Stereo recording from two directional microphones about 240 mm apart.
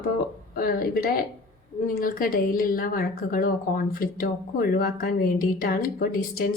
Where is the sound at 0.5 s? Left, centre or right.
Left.